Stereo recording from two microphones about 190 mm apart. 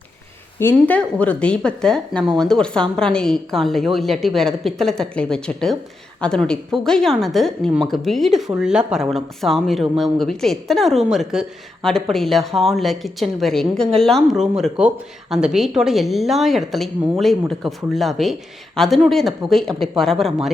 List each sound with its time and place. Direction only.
0.6 s a woman's voice: 10° left (ahead or behind)